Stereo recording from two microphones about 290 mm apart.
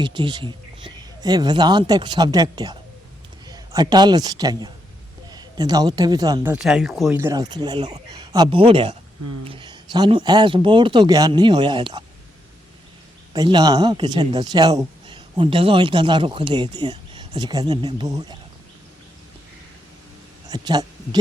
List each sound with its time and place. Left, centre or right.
0.0 s a man's voice: centre
13.3 s a man's voice: centre
20.5 s speech: centre